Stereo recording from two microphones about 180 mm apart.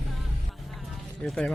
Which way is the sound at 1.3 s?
5° left (ahead or behind).